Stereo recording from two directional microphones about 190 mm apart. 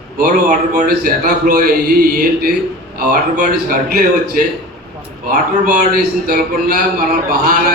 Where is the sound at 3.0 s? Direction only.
50° right (ahead or behind).